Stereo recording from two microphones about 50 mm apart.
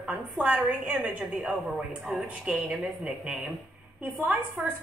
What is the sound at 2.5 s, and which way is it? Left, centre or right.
Speech, centre.